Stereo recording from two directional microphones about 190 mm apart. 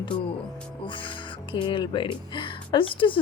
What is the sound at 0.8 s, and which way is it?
Speech, 25° left (ahead or behind).